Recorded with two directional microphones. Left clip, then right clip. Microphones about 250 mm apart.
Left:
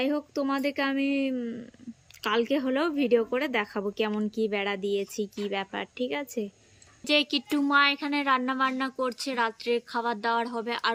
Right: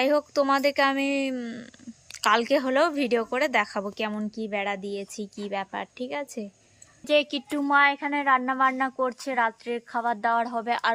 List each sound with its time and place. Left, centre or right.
0.0 s speech: centre